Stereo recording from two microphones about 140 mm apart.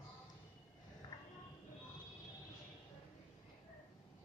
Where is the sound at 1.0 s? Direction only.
25° left (ahead or behind).